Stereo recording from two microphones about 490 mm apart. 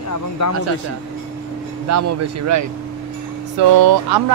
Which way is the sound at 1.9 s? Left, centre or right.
Right.